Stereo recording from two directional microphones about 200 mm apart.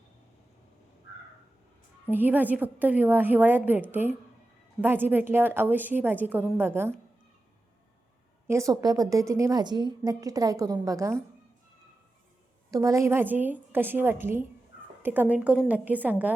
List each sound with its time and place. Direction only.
2.0 s a woman's voice: 10° right (ahead or behind)
8.4 s a woman's voice: 15° right (ahead or behind)
12.7 s a woman's voice: 15° right (ahead or behind)